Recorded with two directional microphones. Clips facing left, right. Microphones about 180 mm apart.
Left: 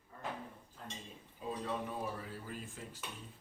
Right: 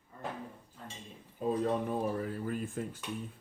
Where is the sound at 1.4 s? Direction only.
45° right (ahead or behind).